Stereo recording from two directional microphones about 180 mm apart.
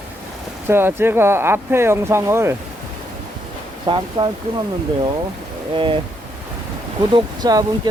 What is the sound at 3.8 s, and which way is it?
Speech, 25° right (ahead or behind).